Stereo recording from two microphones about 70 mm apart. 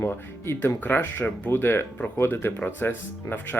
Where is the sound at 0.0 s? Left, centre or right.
Left.